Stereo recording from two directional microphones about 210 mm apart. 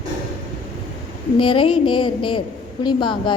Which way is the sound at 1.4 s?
25° left (ahead or behind).